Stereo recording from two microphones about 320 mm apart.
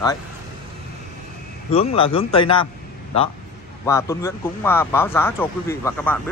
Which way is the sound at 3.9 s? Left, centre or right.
Centre.